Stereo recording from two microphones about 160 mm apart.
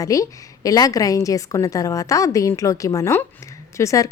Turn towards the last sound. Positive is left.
turn(degrees=20)  # may be behind; listen again after turning